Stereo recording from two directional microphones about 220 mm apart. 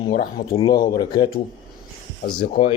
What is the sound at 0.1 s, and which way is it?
Speech, 40° left (ahead or behind).